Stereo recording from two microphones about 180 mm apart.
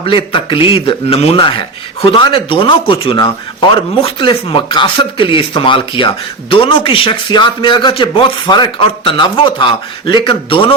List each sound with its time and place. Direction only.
0.0 s a man's voice: 30° left (ahead or behind)